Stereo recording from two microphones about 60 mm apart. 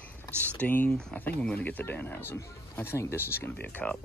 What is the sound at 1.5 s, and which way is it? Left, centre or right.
Speech, left.